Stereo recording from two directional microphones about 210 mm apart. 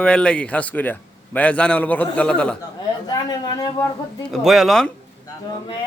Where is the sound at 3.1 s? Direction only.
20° left (ahead or behind).